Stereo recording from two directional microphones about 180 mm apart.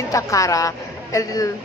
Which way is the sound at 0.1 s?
20° left (ahead or behind).